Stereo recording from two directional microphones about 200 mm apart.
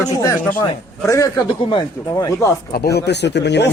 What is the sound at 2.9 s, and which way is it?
Speech, 55° left (ahead or behind).